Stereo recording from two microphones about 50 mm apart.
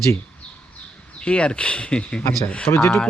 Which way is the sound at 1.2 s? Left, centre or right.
Left.